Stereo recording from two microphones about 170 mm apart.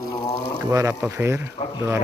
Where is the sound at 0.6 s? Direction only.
20° right (ahead or behind).